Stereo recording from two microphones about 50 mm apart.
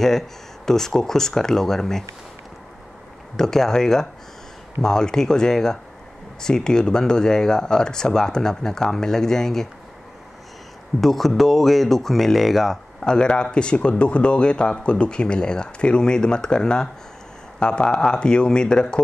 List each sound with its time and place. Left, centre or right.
0.7 s speech: centre
3.3 s speech: centre
11.0 s speech: centre
13.0 s speech: centre